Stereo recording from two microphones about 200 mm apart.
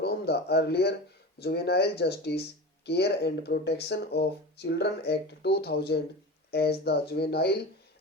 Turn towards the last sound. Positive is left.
turn(degrees=55)  # may be behind; listen again after turning